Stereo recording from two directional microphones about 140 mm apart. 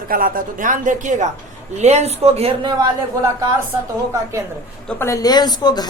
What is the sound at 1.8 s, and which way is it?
Speech, 55° right (ahead or behind).